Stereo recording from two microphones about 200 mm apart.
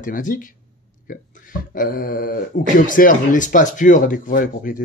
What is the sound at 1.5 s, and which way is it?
Speech, 45° left (ahead or behind).